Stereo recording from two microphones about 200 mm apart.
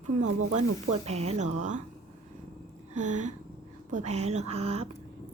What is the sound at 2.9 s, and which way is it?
Speech, 35° right (ahead or behind).